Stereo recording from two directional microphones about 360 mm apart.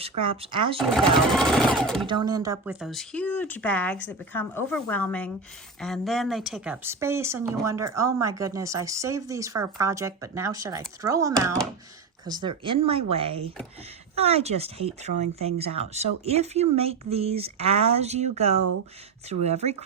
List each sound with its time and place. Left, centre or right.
0.0 s speech: centre
1.3 s speech: centre
2.0 s speech: centre